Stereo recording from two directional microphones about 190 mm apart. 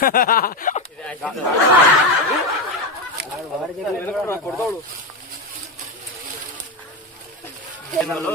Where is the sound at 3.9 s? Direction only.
5° left (ahead or behind).